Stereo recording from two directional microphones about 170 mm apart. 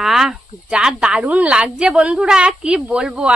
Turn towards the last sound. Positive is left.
turn(degrees=-5)  # may be behind; listen again after turning